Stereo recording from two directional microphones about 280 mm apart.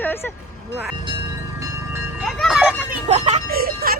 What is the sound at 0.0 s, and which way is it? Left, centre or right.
Vehicle, centre.